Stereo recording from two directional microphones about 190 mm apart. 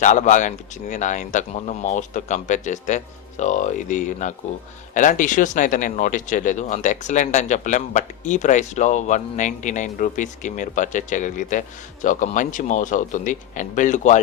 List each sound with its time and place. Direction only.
0.0 s speech: 40° left (ahead or behind)